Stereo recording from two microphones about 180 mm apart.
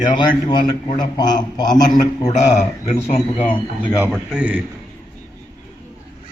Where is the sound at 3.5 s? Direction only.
25° left (ahead or behind).